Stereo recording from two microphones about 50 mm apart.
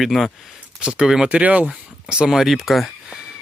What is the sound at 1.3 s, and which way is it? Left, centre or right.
Speech, right.